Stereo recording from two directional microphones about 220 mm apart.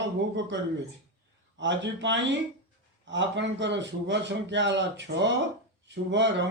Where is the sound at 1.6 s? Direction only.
55° right (ahead or behind).